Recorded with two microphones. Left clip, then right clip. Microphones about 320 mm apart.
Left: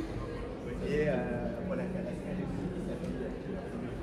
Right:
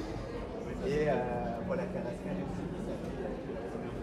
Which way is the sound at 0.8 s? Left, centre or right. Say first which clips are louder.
Even; right.